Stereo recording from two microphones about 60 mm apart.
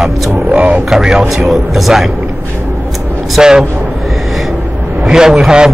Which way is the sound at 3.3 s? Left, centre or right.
Centre.